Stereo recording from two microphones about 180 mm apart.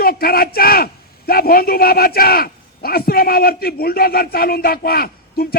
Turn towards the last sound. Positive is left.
turn(degrees=55)  # may be behind; listen again after turning